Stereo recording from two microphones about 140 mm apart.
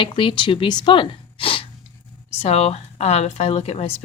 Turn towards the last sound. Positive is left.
turn(degrees=45)  # may be behind; listen again after turning